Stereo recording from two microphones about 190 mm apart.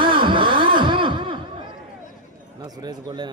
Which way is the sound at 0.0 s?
25° right (ahead or behind).